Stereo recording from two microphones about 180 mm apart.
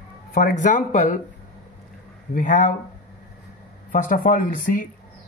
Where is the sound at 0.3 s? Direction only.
50° left (ahead or behind).